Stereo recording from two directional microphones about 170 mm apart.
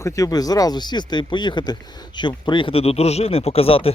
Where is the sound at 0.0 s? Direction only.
20° left (ahead or behind).